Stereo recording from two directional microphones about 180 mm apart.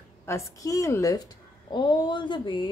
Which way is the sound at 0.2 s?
15° left (ahead or behind).